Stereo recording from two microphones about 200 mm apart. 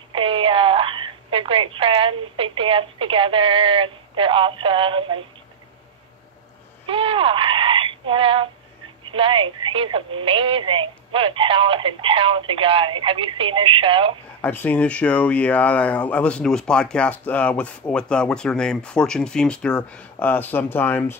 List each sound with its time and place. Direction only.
0.1 s a woman's voice: 25° right (ahead or behind)
6.9 s frog: 25° right (ahead or behind)
9.0 s a woman's voice: 25° right (ahead or behind)
14.4 s speech: 10° left (ahead or behind)